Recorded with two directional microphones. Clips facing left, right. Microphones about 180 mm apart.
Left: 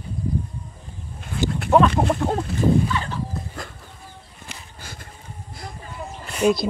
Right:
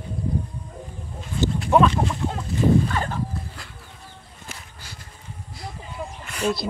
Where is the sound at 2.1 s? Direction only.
60° left (ahead or behind).